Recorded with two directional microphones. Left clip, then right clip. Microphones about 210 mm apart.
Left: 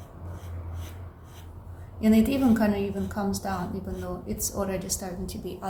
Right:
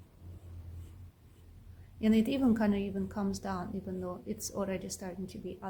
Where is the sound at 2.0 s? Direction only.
50° right (ahead or behind).